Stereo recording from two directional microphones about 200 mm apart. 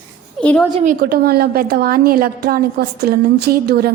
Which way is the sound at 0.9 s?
50° right (ahead or behind).